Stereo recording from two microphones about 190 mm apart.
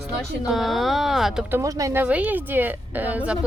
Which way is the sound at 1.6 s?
15° right (ahead or behind).